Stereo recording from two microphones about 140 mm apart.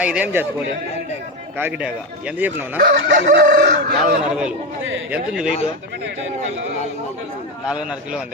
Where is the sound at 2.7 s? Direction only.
70° right (ahead or behind); by 4.2 s 90° right.